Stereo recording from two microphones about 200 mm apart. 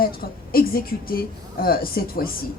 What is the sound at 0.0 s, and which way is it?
A woman's voice, 50° left (ahead or behind).